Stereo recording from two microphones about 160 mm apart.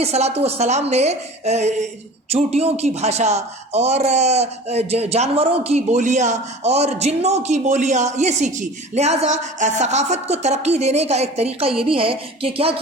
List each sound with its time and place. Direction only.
0.0 s a man's voice: 40° right (ahead or behind)